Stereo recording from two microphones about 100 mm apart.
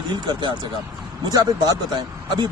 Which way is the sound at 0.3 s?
55° right (ahead or behind).